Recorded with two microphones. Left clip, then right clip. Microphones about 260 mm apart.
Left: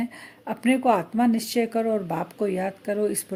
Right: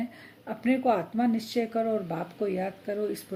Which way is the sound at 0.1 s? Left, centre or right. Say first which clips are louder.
Left 5 dB; left.